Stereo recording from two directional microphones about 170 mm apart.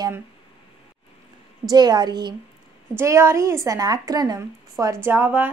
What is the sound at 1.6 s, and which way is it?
Speech, 25° right (ahead or behind).